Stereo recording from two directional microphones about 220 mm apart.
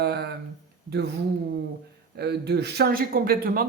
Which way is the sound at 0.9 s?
50° right (ahead or behind).